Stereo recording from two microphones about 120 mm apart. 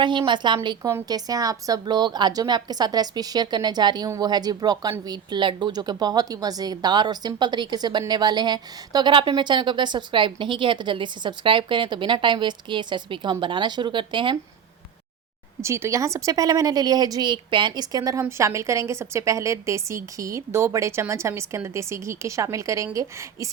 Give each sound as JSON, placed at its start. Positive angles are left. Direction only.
{"t": 0.0, "sound": "speech", "side_deg": -40}
{"t": 15.6, "sound": "a woman's voice", "side_deg": -25}